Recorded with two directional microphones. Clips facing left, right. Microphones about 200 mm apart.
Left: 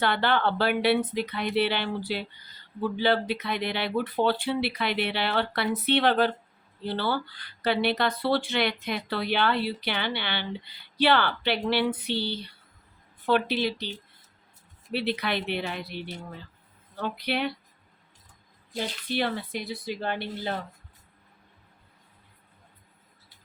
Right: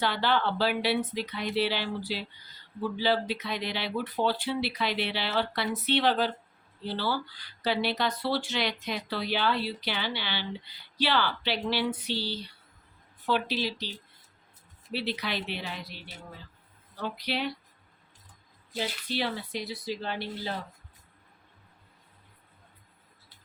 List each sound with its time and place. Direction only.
0.0 s speech: 60° left (ahead or behind)
14.9 s speech: 60° left (ahead or behind)
19.1 s speech: 55° left (ahead or behind)